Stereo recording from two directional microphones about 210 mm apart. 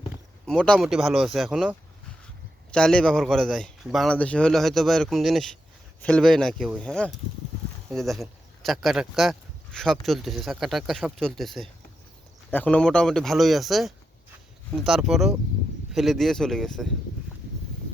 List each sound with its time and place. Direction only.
0.4 s a man's voice: 5° left (ahead or behind)
2.7 s a man's voice: 5° left (ahead or behind)